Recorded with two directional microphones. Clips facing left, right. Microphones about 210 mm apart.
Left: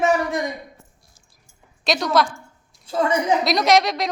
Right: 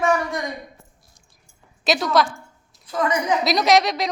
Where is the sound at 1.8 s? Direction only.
Centre (ahead or behind).